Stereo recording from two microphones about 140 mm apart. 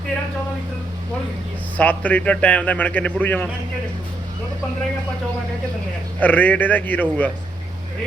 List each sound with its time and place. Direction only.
1.7 s a man's voice: 10° left (ahead or behind)
6.1 s a man's voice: 10° left (ahead or behind)